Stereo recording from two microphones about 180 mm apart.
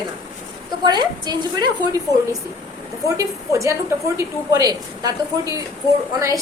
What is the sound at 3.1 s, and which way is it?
A woman's voice, 15° right (ahead or behind).